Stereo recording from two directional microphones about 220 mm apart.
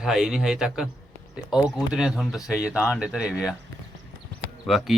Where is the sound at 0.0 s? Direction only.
Centre (ahead or behind).